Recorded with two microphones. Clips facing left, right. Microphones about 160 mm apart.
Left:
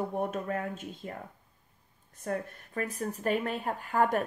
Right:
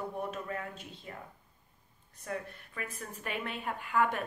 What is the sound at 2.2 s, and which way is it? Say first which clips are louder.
Speech: left 5 dB; 45° left (ahead or behind).